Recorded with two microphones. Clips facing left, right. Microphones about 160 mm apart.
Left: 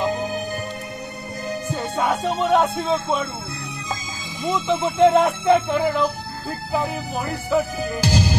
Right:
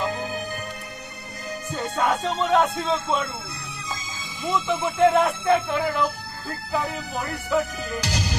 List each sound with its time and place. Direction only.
0.0 s music: 25° left (ahead or behind)
2.0 s speech: 10° left (ahead or behind)
4.4 s music: 20° left (ahead or behind)